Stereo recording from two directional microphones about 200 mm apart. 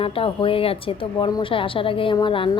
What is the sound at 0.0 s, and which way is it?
A woman's voice, 25° left (ahead or behind).